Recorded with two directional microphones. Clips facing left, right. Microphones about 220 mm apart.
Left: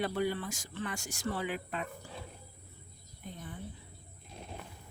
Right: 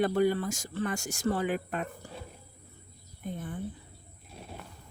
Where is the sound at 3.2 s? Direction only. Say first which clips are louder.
Right 8 dB; 50° right (ahead or behind).